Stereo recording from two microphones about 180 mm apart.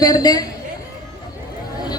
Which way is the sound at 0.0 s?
20° left (ahead or behind).